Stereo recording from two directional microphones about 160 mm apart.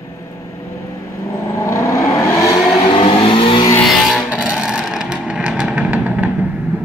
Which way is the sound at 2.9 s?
35° left (ahead or behind).